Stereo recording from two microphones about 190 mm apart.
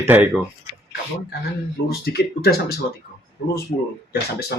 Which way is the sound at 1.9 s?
55° left (ahead or behind).